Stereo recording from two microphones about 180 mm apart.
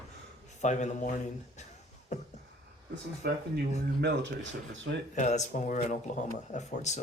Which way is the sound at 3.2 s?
65° right (ahead or behind).